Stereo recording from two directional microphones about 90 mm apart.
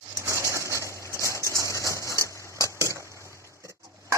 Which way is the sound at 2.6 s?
35° left (ahead or behind).